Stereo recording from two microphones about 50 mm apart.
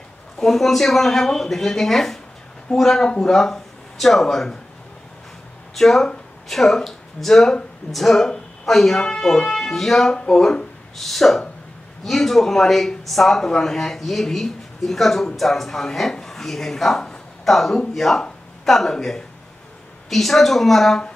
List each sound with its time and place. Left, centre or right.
0.4 s speech: centre
5.8 s speech: centre
11.0 s speech: centre